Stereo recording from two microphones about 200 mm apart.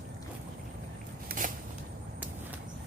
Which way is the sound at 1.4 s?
40° right (ahead or behind).